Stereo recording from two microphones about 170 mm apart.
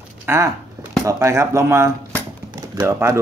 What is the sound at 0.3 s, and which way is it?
A man's voice, 15° right (ahead or behind).